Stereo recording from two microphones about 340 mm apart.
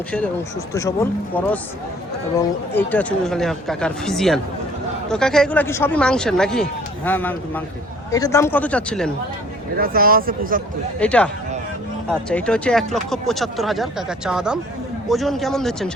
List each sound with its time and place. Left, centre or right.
0.7 s speech: centre
2.7 s speech: centre
9.7 s speech: right
11.0 s speech: centre
12.3 s speech: centre